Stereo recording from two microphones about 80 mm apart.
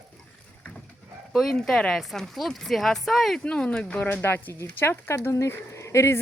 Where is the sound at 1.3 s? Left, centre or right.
Centre.